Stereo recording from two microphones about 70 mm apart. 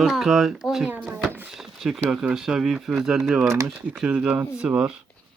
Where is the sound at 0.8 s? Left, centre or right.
Right.